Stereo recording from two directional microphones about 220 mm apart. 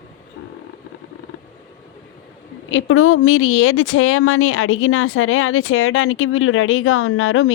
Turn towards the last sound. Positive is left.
turn(degrees=65)  # may be behind; listen again after turning